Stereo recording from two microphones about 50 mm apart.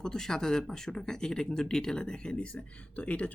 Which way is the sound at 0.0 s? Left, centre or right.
Centre.